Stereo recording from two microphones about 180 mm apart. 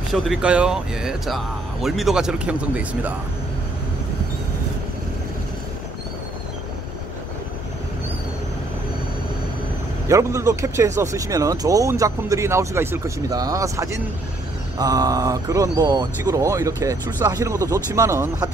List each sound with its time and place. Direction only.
0.1 s speech: 5° right (ahead or behind)
10.0 s speech: 15° right (ahead or behind)